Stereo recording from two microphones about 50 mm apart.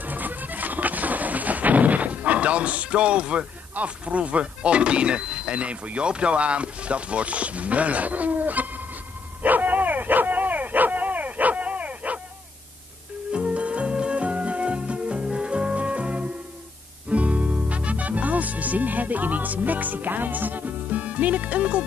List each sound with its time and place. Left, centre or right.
0.0 s music: right
9.4 s dog: right
13.3 s music: right